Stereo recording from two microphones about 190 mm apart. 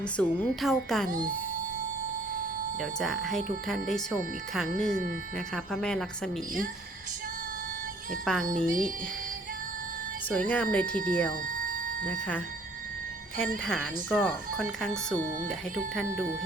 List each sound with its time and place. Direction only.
0.2 s a woman's voice: 5° left (ahead or behind)
3.0 s a woman's voice: centre (ahead or behind)
8.2 s a woman's voice: centre (ahead or behind)
8.4 s a woman's voice: 45° right (ahead or behind)
10.2 s speech: 5° left (ahead or behind)
13.7 s a woman's voice: 5° left (ahead or behind)